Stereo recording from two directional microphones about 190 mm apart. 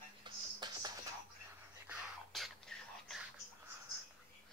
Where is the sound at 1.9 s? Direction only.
Centre (ahead or behind).